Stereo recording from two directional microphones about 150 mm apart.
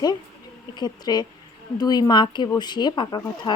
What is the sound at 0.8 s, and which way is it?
A woman's voice, 25° left (ahead or behind).